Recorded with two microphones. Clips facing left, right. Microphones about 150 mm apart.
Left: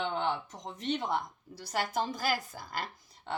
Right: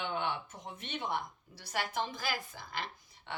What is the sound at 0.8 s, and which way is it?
A woman's voice, 40° left (ahead or behind).